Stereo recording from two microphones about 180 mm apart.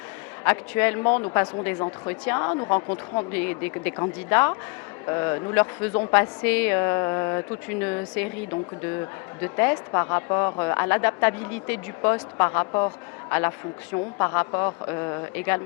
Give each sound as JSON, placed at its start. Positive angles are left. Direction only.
{"t": 0.4, "sound": "a woman's voice", "side_deg": 10}
{"t": 3.3, "sound": "a woman's voice", "side_deg": 10}
{"t": 5.9, "sound": "speech", "side_deg": 25}
{"t": 6.1, "sound": "a woman's voice", "side_deg": 10}
{"t": 9.4, "sound": "a woman's voice", "side_deg": 15}
{"t": 13.9, "sound": "speech", "side_deg": 20}